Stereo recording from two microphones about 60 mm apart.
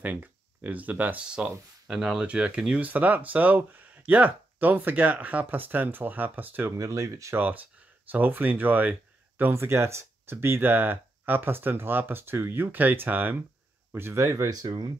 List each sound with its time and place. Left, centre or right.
0.0 s speech: right
1.2 s speech: centre
1.9 s speech: centre
2.1 s speech: centre
6.8 s speech: right
7.3 s speech: right
9.4 s speech: right
14.1 s speech: right